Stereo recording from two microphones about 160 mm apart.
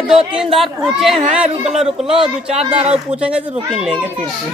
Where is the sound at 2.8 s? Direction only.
40° right (ahead or behind).